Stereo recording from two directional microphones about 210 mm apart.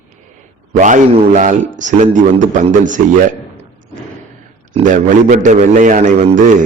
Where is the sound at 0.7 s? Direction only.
35° right (ahead or behind).